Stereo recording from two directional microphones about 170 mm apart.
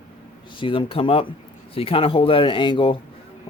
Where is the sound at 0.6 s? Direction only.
30° left (ahead or behind).